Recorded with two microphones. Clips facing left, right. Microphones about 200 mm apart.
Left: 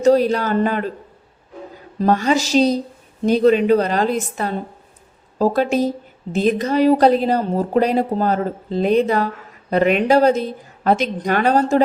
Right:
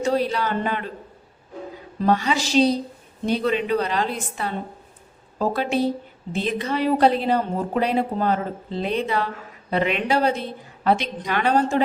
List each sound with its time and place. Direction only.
0.0 s speech: 40° left (ahead or behind)
2.0 s speech: 45° left (ahead or behind)